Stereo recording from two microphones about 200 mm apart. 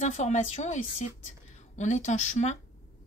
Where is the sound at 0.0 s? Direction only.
35° left (ahead or behind).